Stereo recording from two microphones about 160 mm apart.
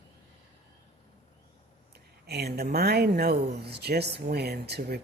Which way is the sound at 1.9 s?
90° right.